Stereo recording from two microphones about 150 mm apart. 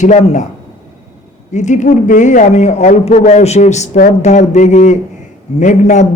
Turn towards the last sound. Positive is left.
turn(degrees=55)  # may be behind; listen again after turning